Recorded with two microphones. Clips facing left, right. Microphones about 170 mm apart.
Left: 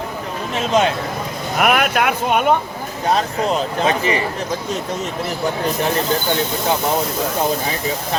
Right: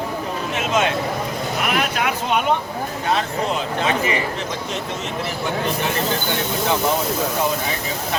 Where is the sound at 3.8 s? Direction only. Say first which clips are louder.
Left 2 dB; 35° left (ahead or behind).